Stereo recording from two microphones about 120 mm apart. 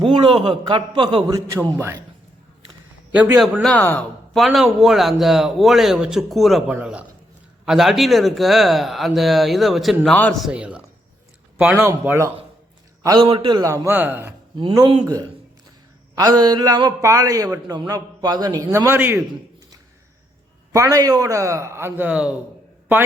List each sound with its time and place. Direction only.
0.0 s a man's voice: 40° right (ahead or behind)
1.3 s a man's voice: 30° right (ahead or behind)
3.1 s a man's voice: 10° right (ahead or behind)
3.6 s speech: 10° left (ahead or behind)
4.4 s a man's voice: centre (ahead or behind)
11.9 s a man's voice: 20° right (ahead or behind)
13.2 s a man's voice: 40° right (ahead or behind)
13.9 s a man's voice: 15° right (ahead or behind)
14.5 s a man's voice: 45° right (ahead or behind)
15.0 s a man's voice: 30° right (ahead or behind)
18.9 s a man's voice: 20° right (ahead or behind)
20.7 s a man's voice: 30° right (ahead or behind); by 22.4 s 10° right (ahead or behind)